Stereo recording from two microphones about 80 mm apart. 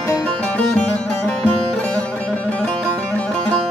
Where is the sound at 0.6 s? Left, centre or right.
Centre.